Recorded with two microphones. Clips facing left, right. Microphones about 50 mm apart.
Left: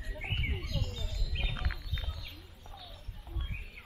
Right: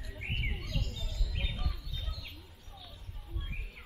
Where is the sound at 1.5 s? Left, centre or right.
Left.